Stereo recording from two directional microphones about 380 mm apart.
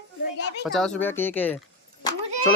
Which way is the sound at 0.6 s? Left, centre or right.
Centre.